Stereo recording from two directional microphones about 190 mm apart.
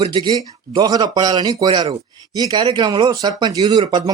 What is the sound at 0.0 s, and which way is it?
Speech, 20° right (ahead or behind).